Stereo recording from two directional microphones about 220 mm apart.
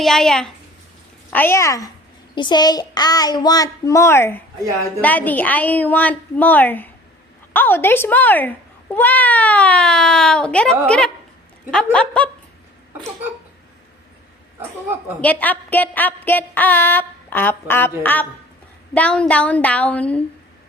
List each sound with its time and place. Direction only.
0.0 s speech: centre (ahead or behind)
15.2 s speech: 5° left (ahead or behind)